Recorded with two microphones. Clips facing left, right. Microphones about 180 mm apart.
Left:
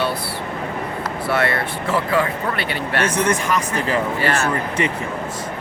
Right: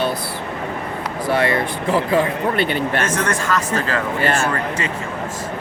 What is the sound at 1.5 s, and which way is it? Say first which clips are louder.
Speech: right 3 dB; 15° right (ahead or behind).